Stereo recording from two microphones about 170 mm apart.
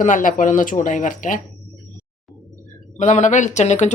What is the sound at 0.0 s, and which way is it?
A woman's voice, 50° left (ahead or behind).